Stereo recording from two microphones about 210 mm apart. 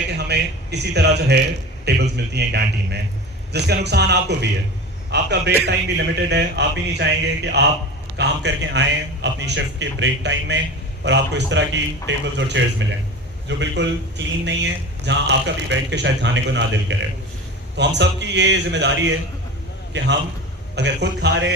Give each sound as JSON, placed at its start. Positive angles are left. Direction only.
{"t": 0.1, "sound": "a man's voice", "side_deg": -50}